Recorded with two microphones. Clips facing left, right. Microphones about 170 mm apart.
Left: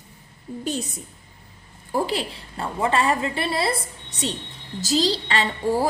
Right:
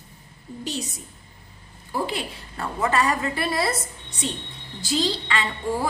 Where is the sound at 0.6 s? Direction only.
55° left (ahead or behind).